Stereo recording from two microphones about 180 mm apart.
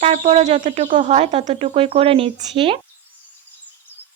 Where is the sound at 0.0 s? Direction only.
35° right (ahead or behind).